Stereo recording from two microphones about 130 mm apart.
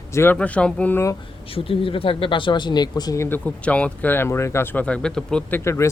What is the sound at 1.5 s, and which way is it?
Speech, 45° left (ahead or behind).